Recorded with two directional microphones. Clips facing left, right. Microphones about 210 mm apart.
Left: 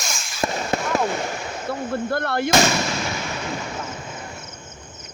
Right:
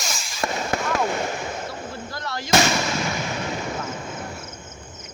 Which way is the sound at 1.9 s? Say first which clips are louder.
Left 9 dB; 60° left (ahead or behind).